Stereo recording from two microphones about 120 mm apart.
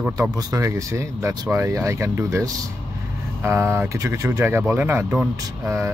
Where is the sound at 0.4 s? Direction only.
25° right (ahead or behind).